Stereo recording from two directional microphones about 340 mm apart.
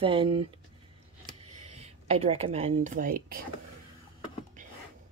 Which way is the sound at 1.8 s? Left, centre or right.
Centre.